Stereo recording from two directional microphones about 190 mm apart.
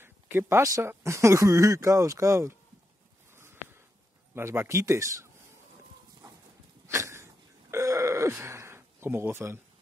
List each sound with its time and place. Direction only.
0.0 s speech: 10° right (ahead or behind)
4.4 s speech: 15° right (ahead or behind)
6.9 s a sound: 15° right (ahead or behind)